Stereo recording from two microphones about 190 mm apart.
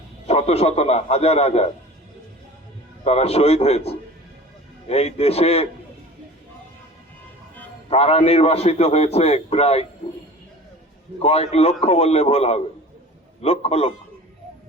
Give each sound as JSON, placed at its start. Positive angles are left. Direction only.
{"t": 0.3, "sound": "a man's voice", "side_deg": 35}
{"t": 3.0, "sound": "a man's voice", "side_deg": 35}
{"t": 7.9, "sound": "a man's voice", "side_deg": 30}
{"t": 11.2, "sound": "a man's voice", "side_deg": 30}